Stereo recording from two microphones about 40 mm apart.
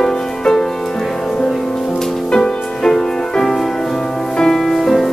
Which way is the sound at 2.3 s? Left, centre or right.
Centre.